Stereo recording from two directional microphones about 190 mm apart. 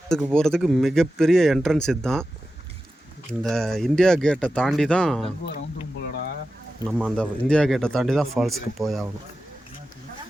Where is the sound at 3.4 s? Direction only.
Centre (ahead or behind).